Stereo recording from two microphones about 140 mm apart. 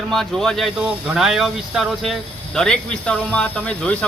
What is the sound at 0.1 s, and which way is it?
A man's voice, centre (ahead or behind).